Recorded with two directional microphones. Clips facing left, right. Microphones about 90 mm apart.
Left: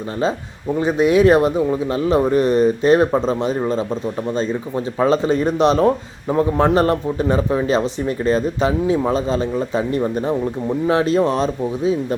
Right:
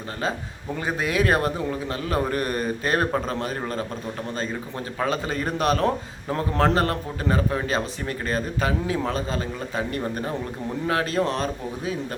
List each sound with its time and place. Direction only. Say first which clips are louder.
0.8 s speech: left 10 dB; 25° left (ahead or behind)
4.9 s speech: left 9 dB; 30° left (ahead or behind)